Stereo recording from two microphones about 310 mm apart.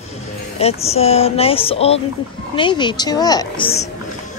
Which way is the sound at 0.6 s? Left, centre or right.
Centre.